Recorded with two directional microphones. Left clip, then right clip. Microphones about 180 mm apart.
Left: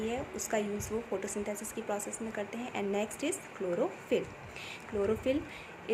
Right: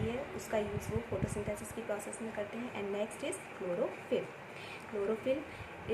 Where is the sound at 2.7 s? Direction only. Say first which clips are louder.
Left 5 dB; 55° left (ahead or behind).